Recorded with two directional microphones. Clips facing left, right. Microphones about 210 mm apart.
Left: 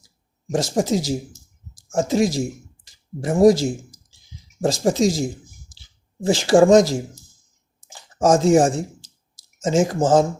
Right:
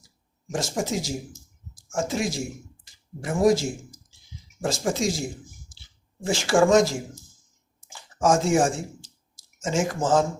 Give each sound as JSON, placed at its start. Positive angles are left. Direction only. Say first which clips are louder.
{"t": 0.5, "sound": "speech", "louder": "left 7 dB", "side_deg": 35}
{"t": 6.2, "sound": "speech", "louder": "left 6 dB", "side_deg": 35}